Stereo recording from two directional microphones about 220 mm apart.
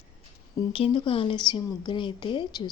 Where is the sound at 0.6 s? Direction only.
25° left (ahead or behind).